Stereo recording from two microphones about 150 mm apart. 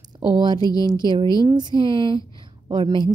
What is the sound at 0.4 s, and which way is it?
A woman's voice, 30° right (ahead or behind).